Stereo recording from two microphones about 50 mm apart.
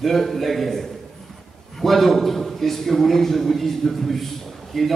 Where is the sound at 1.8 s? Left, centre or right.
Centre.